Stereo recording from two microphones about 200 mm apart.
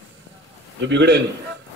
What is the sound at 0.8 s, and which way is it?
Speech, 60° right (ahead or behind).